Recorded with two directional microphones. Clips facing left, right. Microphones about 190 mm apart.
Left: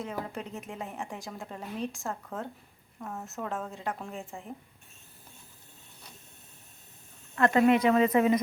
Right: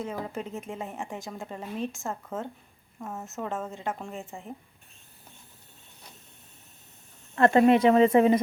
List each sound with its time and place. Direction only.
0.0 s a woman's voice: centre (ahead or behind)
7.3 s speech: 30° right (ahead or behind)